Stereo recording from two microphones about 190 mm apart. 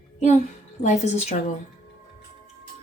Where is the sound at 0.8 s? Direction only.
35° left (ahead or behind).